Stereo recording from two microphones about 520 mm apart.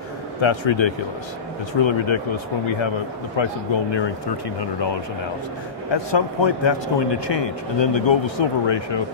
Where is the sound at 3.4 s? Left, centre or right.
Left.